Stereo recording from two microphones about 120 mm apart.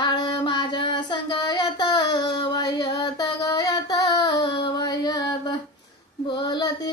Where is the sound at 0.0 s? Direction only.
40° left (ahead or behind).